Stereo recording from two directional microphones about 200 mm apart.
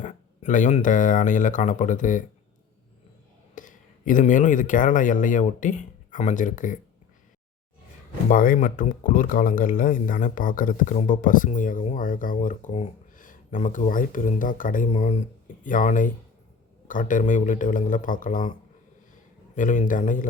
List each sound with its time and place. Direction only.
0.0 s speech: 40° left (ahead or behind)
3.5 s speech: 40° left (ahead or behind)
8.3 s speech: 40° left (ahead or behind)
19.5 s speech: 40° left (ahead or behind)